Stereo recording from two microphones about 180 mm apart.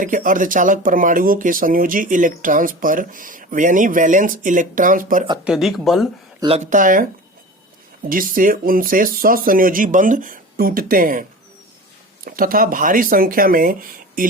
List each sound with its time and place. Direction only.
0.0 s speech: 50° right (ahead or behind)
5.5 s speech: centre (ahead or behind)
6.4 s speech: 35° right (ahead or behind)
8.1 s speech: 50° right (ahead or behind)